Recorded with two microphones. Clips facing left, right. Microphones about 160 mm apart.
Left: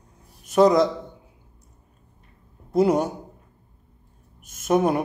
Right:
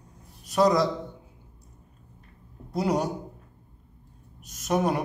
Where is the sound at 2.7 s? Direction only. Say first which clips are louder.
Left 6 dB; 50° left (ahead or behind).